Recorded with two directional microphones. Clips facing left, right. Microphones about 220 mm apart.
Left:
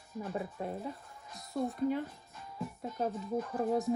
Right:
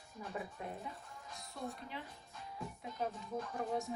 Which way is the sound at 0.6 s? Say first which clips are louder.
Left 7 dB; 40° left (ahead or behind).